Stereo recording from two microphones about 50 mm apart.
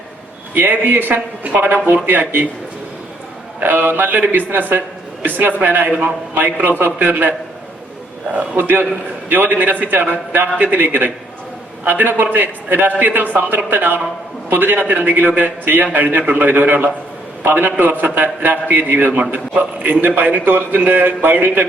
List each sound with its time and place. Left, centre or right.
0.5 s a man's voice: right
3.6 s a man's voice: right
8.4 s a man's voice: right
19.1 s a man's voice: right